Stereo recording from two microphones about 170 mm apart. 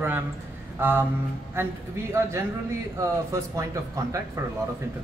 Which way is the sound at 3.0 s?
20° right (ahead or behind).